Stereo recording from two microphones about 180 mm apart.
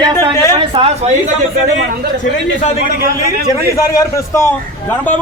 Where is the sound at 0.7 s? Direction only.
30° right (ahead or behind).